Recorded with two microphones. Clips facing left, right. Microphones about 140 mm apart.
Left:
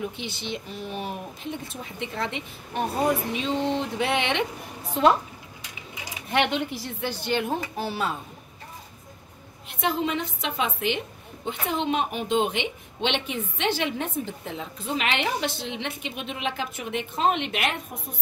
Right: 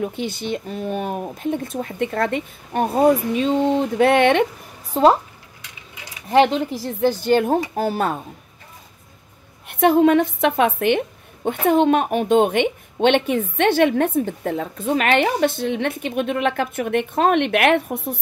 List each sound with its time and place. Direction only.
0.1 s a woman's voice: 50° right (ahead or behind)
4.9 s speech: 40° right (ahead or behind)
6.3 s a woman's voice: 35° right (ahead or behind)
9.7 s a woman's voice: 55° right (ahead or behind)